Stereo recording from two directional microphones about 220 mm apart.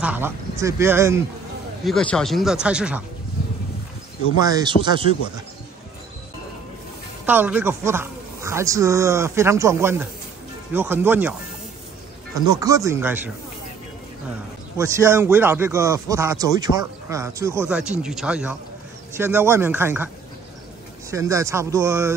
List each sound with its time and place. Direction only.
0.0 s speech: 10° right (ahead or behind)
1.9 s speech: 5° left (ahead or behind)
4.4 s speech: 15° right (ahead or behind)
7.2 s speech: 10° right (ahead or behind)
12.4 s speech: 15° right (ahead or behind)
14.8 s speech: 10° right (ahead or behind)
21.1 s speech: 15° right (ahead or behind)